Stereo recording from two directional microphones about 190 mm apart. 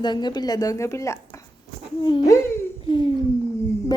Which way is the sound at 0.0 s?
25° left (ahead or behind).